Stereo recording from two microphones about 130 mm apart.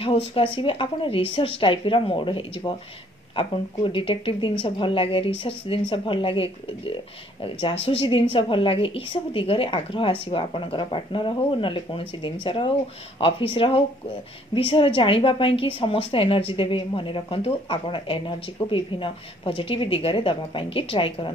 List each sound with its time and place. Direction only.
0.0 s a woman's voice: 45° left (ahead or behind)